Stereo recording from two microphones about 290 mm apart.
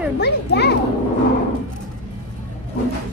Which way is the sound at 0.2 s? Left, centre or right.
Left.